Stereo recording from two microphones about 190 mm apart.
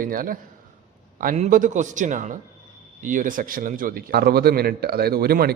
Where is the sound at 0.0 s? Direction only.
45° right (ahead or behind).